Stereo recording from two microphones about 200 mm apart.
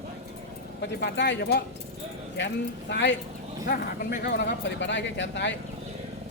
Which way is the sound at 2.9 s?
60° left (ahead or behind).